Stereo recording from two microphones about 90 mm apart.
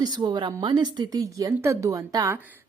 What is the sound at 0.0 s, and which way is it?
A woman's voice, 50° right (ahead or behind).